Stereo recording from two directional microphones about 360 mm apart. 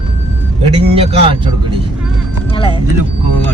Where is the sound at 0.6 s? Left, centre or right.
Centre.